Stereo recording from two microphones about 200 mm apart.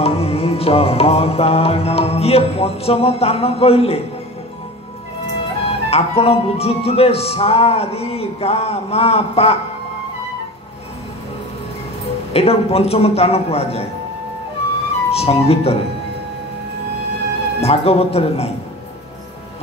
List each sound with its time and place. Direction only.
0.0 s music: 30° left (ahead or behind)
5.7 s speech: 30° left (ahead or behind)
12.3 s speech: 30° left (ahead or behind)
15.0 s speech: 30° left (ahead or behind)
17.6 s speech: 30° left (ahead or behind)